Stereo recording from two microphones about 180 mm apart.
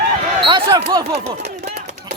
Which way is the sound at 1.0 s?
35° right (ahead or behind).